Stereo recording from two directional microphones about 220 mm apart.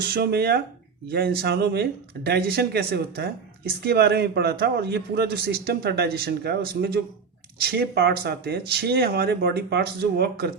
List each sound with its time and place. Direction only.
0.0 s speech: 45° right (ahead or behind)